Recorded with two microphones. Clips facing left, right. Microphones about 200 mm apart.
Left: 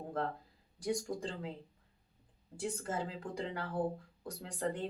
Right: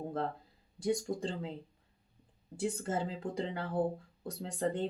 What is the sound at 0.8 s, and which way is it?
Speech, 25° right (ahead or behind).